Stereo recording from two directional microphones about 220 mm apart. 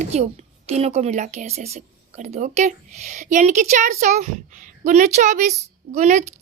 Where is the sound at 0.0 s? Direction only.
30° right (ahead or behind).